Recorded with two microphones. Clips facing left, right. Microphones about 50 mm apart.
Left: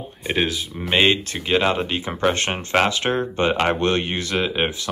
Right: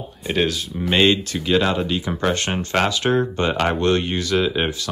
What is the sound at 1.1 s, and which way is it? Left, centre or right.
Speech, left.